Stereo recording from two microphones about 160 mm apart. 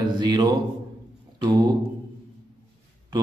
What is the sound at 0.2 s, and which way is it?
Speech, 25° right (ahead or behind).